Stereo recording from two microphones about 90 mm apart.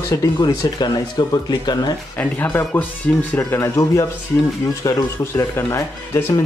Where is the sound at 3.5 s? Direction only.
35° left (ahead or behind).